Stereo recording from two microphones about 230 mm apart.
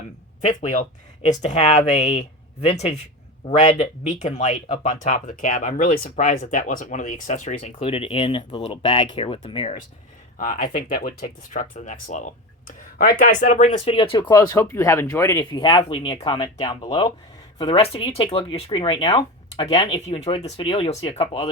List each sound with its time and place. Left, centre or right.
0.6 s speech: left
10.3 s speech: left